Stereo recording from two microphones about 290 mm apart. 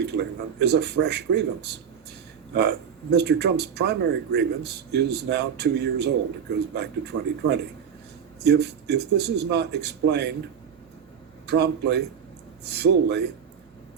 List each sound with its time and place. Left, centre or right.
0.0 s speech: right
11.4 s speech: right